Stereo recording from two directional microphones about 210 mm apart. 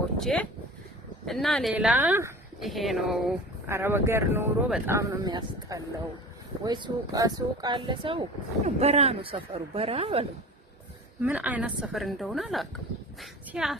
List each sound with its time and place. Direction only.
0.2 s a woman's voice: centre (ahead or behind)
3.7 s speech: 10° right (ahead or behind); by 10.2 s 25° right (ahead or behind)
11.2 s a woman's voice: 5° right (ahead or behind)